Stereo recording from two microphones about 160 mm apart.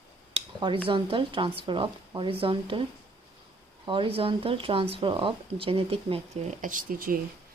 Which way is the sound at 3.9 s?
35° right (ahead or behind).